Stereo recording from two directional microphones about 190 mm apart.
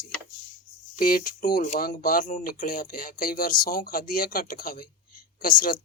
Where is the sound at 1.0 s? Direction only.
50° left (ahead or behind).